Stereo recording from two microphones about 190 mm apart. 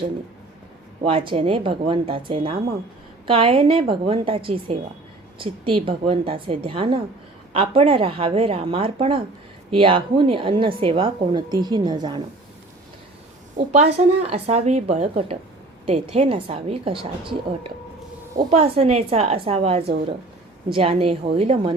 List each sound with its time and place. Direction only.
1.0 s speech: 30° right (ahead or behind)
13.7 s speech: 35° right (ahead or behind)
18.3 s speech: 30° right (ahead or behind)